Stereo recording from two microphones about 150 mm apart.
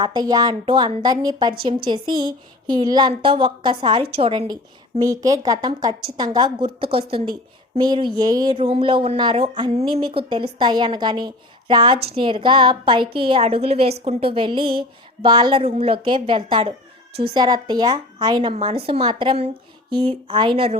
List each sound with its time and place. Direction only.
0.0 s a woman's voice: 25° right (ahead or behind)
4.9 s a woman's voice: 25° right (ahead or behind)
18.6 s speech: 40° right (ahead or behind)